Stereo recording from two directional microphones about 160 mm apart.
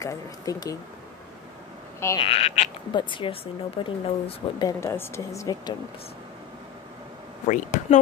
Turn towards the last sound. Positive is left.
turn(degrees=50)  # may be behind; listen again after turning